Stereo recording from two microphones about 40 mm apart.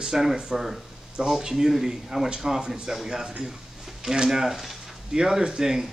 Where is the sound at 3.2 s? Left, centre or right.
Centre.